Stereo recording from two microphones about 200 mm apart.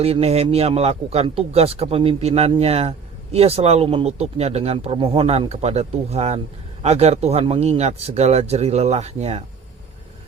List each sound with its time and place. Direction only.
0.0 s speech: 30° right (ahead or behind)